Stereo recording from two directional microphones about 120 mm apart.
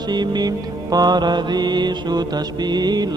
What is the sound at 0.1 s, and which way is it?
Mantra, 35° right (ahead or behind).